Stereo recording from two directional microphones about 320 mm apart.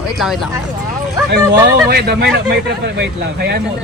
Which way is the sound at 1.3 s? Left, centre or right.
Right.